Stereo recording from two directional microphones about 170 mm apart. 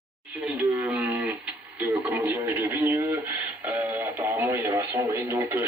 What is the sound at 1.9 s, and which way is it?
Speech, 15° right (ahead or behind).